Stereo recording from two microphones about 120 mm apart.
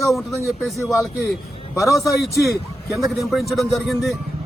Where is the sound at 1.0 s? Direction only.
Centre (ahead or behind).